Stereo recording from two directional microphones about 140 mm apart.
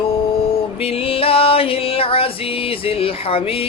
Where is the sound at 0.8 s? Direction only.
45° left (ahead or behind).